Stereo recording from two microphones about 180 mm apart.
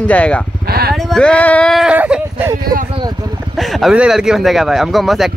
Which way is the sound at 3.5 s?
Centre (ahead or behind).